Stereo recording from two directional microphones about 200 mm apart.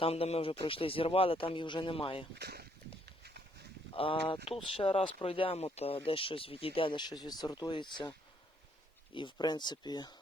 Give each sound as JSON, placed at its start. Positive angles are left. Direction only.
{"t": 0.0, "sound": "speech", "side_deg": 30}
{"t": 2.3, "sound": "speech", "side_deg": -55}
{"t": 3.1, "sound": "horse", "side_deg": -55}
{"t": 3.9, "sound": "speech", "side_deg": 25}
{"t": 9.1, "sound": "speech", "side_deg": 20}